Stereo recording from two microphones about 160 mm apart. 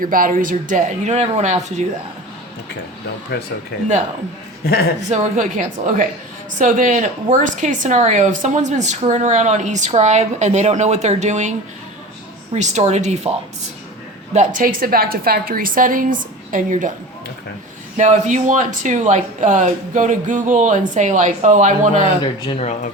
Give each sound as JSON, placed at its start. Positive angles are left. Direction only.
{"t": 0.0, "sound": "speech", "side_deg": -60}
{"t": 3.3, "sound": "a man's voice", "side_deg": 90}
{"t": 4.6, "sound": "speech", "side_deg": 75}
{"t": 5.1, "sound": "speech", "side_deg": -55}
{"t": 12.5, "sound": "speech", "side_deg": -45}
{"t": 14.3, "sound": "a woman's voice", "side_deg": -55}
{"t": 17.9, "sound": "speech", "side_deg": -50}
{"t": 22.0, "sound": "speech", "side_deg": 35}